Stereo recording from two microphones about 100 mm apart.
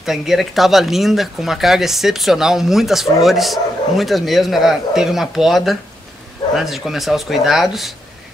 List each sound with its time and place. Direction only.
0.0 s speech: 5° right (ahead or behind)